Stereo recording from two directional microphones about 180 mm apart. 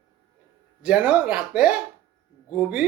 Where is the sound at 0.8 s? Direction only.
5° right (ahead or behind).